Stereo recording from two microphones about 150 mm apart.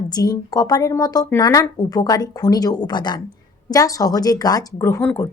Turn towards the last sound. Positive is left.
turn(degrees=20)  # may be behind; listen again after turning